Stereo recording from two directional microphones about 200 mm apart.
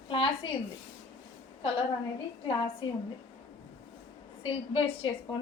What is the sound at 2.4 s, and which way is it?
Speech, 25° left (ahead or behind).